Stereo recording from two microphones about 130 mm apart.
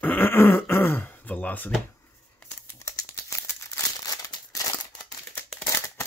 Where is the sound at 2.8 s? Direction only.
25° left (ahead or behind).